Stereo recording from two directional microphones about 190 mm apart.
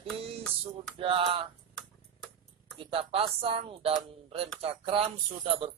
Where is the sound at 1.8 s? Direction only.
5° left (ahead or behind).